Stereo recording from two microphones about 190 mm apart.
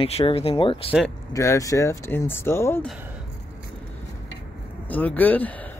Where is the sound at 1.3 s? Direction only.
15° left (ahead or behind).